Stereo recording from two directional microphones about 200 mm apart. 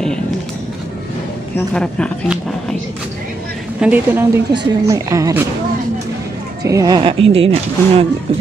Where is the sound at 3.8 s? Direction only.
10° right (ahead or behind).